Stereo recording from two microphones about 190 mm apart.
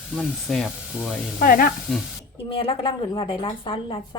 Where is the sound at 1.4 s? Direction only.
45° left (ahead or behind).